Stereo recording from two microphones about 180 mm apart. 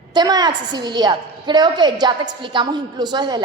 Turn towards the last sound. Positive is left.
turn(degrees=-25)  # may be behind; listen again after turning